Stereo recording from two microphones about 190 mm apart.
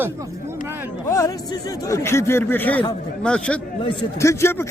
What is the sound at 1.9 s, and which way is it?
A man's voice, 15° left (ahead or behind).